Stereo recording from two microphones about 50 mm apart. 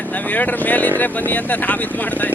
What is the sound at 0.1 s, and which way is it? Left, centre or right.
Speech, left.